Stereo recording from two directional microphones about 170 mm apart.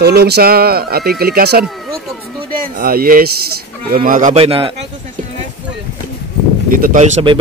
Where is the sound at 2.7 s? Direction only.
60° right (ahead or behind).